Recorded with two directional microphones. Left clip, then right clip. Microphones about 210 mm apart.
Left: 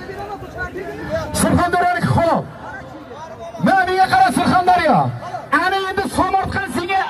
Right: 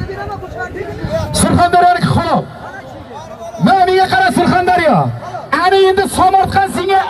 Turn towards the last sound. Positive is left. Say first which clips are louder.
# right 7 dB
turn(degrees=-40)  # may be behind; listen again after turning